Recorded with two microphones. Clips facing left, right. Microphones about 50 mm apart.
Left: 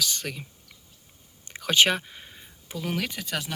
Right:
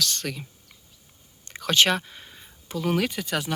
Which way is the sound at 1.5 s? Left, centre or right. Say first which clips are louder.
Even; centre.